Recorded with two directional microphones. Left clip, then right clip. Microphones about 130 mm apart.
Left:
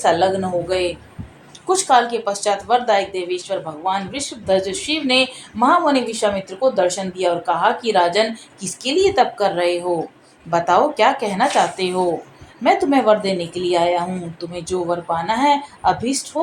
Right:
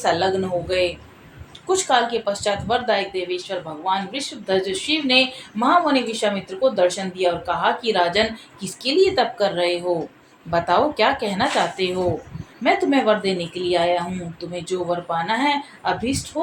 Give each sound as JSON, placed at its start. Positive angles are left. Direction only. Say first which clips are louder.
{"t": 0.0, "sound": "speech", "louder": "left 4 dB", "side_deg": 50}
{"t": 1.6, "sound": "speech", "louder": "left 4 dB", "side_deg": 40}